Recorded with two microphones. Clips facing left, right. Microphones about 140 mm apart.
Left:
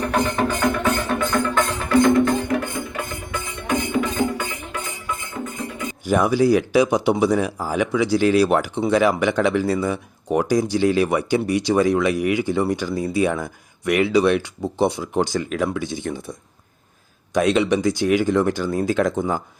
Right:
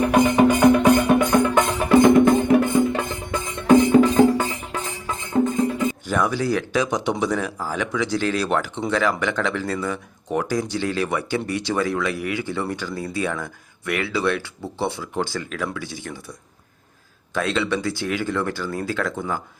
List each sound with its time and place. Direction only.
0.0 s music: 10° right (ahead or behind)
3.7 s music: 35° right (ahead or behind)
6.1 s speech: 15° left (ahead or behind)
17.3 s speech: 15° left (ahead or behind)